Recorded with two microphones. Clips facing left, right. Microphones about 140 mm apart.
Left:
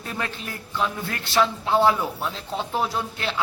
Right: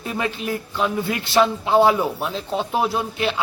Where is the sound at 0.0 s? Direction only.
15° right (ahead or behind).